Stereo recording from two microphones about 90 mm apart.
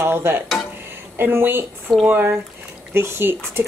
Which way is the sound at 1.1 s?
25° right (ahead or behind).